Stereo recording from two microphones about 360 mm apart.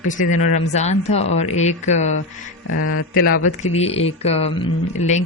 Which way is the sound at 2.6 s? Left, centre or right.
Left.